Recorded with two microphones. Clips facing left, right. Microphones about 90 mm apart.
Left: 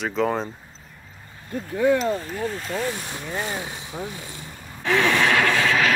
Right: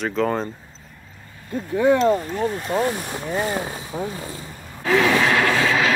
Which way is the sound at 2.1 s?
20° right (ahead or behind).